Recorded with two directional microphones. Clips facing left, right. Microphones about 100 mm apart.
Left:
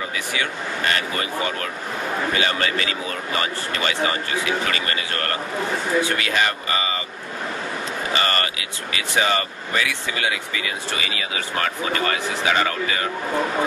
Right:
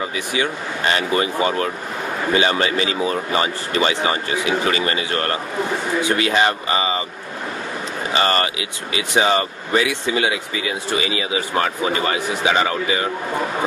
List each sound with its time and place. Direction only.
0.1 s speech: 25° right (ahead or behind)
8.2 s speech: 30° right (ahead or behind)